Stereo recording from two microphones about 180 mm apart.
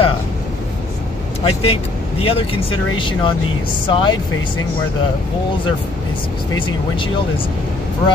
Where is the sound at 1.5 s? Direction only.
35° left (ahead or behind).